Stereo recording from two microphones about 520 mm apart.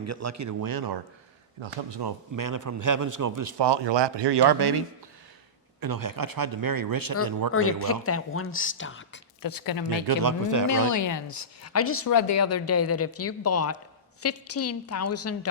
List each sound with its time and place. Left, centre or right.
0.0 s a man's voice: right
3.6 s speech: right
5.8 s a man's voice: right
7.5 s a woman's voice: left
9.4 s speech: left
10.1 s a man's voice: right
10.7 s a woman's voice: left